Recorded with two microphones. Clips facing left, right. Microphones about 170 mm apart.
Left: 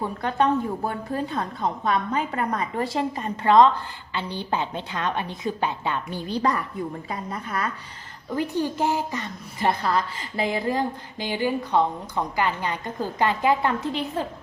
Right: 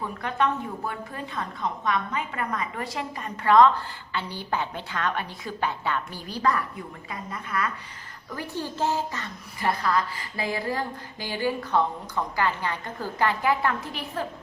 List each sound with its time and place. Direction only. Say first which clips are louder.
0.0 s a woman's voice: left 3 dB; 35° left (ahead or behind)
8.3 s a woman's voice: left 7 dB; 20° left (ahead or behind)